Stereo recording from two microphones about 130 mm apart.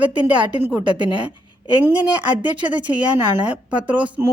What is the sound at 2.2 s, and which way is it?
Speech, 40° right (ahead or behind).